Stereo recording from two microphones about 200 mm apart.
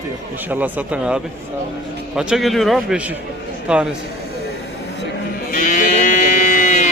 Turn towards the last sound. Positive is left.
turn(degrees=40)  # may be behind; listen again after turning